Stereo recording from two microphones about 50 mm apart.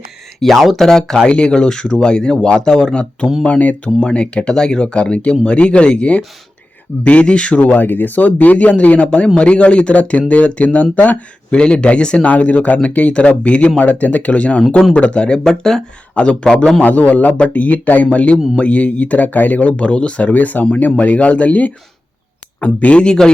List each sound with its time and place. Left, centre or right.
0.3 s a man's voice: centre; by 7.6 s left
7.6 s a man's voice: left
11.5 s a man's voice: left
15.4 s speech: centre
16.1 s a man's voice: left
16.8 s a man's voice: left; by 23.3 s centre